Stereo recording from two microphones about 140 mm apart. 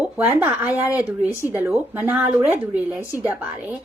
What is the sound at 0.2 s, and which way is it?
Speech, 15° right (ahead or behind).